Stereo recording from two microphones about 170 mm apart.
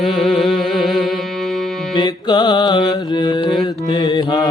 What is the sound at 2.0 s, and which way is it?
Mantra, 25° left (ahead or behind).